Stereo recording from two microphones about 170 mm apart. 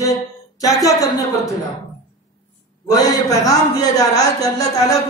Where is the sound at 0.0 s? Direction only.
20° left (ahead or behind).